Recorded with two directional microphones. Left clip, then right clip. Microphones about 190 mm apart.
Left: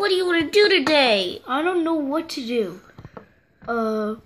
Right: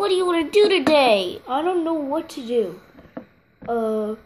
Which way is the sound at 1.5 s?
45° left (ahead or behind).